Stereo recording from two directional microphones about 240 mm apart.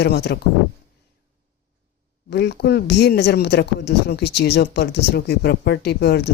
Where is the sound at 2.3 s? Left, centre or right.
Left.